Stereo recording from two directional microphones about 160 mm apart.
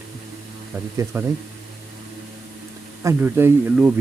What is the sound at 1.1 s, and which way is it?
Speech, 15° right (ahead or behind).